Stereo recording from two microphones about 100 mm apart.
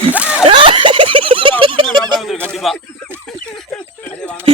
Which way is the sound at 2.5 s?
5° left (ahead or behind).